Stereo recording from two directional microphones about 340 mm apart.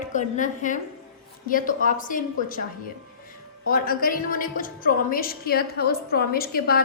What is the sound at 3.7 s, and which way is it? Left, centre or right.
A woman's voice, left.